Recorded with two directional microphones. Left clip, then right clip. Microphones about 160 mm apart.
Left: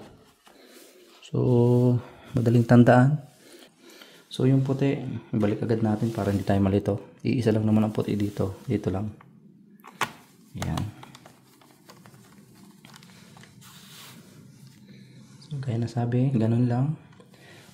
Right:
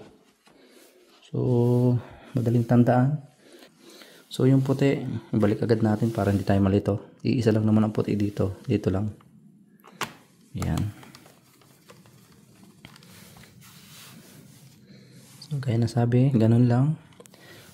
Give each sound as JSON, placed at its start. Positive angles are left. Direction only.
{"t": 1.2, "sound": "a sound", "side_deg": 10}
{"t": 2.4, "sound": "speech", "side_deg": 15}
{"t": 3.9, "sound": "speech", "side_deg": -15}
{"t": 10.5, "sound": "speech", "side_deg": -30}
{"t": 15.4, "sound": "speech", "side_deg": -35}